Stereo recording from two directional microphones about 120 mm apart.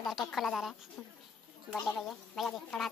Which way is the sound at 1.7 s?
5° left (ahead or behind).